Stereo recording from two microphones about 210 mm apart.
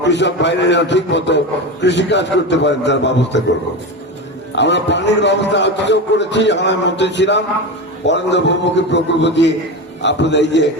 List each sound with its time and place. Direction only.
0.0 s a man's voice: 55° left (ahead or behind)
4.5 s a man's voice: 55° left (ahead or behind)